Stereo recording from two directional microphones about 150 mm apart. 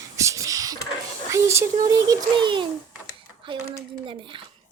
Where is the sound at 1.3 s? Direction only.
20° right (ahead or behind).